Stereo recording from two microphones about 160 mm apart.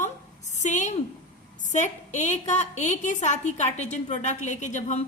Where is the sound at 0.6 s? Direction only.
50° left (ahead or behind).